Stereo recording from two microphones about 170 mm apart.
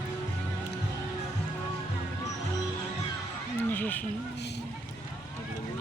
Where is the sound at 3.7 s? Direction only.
10° left (ahead or behind).